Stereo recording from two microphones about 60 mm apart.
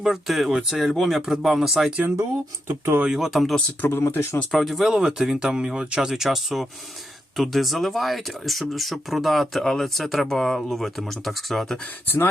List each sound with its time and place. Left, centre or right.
0.0 s speech: centre
2.6 s speech: right
3.1 s speech: centre
3.8 s speech: left
4.5 s speech: centre
12.0 s speech: left